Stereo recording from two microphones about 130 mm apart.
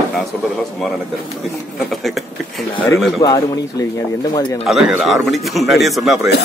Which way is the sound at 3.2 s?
25° left (ahead or behind).